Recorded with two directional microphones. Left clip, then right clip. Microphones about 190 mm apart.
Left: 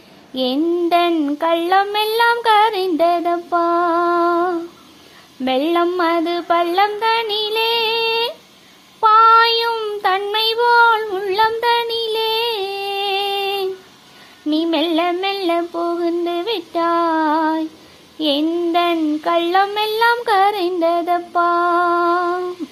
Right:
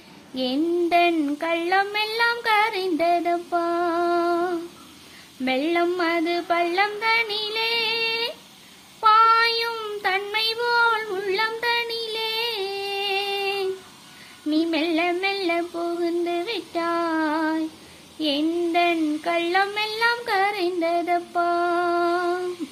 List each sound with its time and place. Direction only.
0.3 s child singing: 30° left (ahead or behind)
5.5 s a sound: 25° left (ahead or behind)
9.0 s child singing: 25° left (ahead or behind)
14.5 s female singing: 25° left (ahead or behind)
18.2 s child singing: 30° left (ahead or behind)